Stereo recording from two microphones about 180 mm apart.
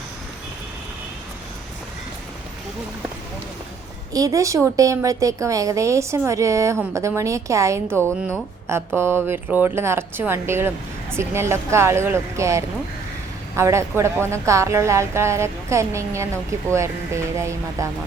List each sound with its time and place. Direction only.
4.1 s a woman's voice: 20° right (ahead or behind)